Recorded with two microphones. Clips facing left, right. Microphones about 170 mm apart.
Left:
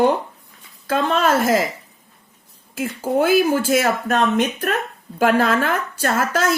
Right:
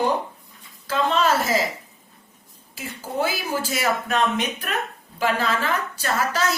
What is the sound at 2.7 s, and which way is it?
Speech, 55° left (ahead or behind).